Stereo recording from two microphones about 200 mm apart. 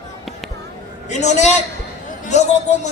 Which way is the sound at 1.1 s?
35° left (ahead or behind).